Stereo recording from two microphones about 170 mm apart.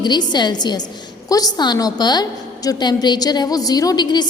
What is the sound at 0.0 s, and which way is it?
A woman's voice, 25° left (ahead or behind).